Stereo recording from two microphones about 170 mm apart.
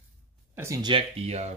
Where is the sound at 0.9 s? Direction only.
40° right (ahead or behind).